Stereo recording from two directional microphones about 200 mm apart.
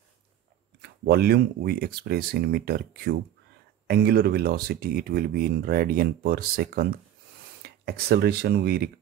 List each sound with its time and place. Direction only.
0.7 s speech: 55° right (ahead or behind)